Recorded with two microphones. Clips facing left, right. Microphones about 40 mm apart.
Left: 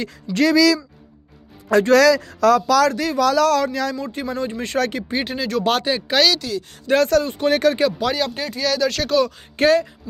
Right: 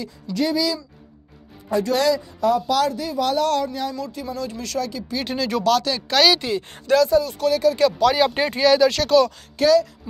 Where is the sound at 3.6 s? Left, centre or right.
Left.